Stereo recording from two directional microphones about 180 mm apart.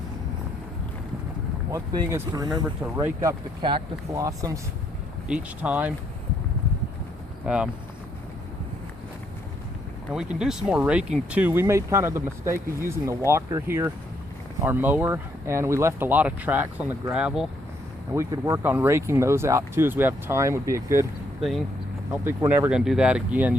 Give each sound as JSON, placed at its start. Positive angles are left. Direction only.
{"t": 1.7, "sound": "speech", "side_deg": -20}
{"t": 2.8, "sound": "speech", "side_deg": -10}
{"t": 5.3, "sound": "speech", "side_deg": -10}
{"t": 7.4, "sound": "speech", "side_deg": -5}
{"t": 10.1, "sound": "speech", "side_deg": -5}
{"t": 18.1, "sound": "speech", "side_deg": -15}
{"t": 22.1, "sound": "speech", "side_deg": -10}